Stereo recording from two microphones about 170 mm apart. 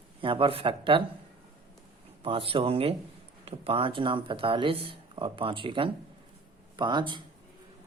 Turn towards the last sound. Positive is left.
turn(degrees=-25)  # may be behind; listen again after turning